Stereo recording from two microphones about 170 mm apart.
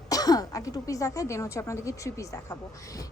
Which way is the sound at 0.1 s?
20° left (ahead or behind).